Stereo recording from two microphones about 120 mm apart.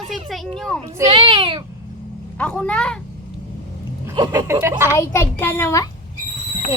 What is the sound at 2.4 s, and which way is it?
Speech, 10° left (ahead or behind).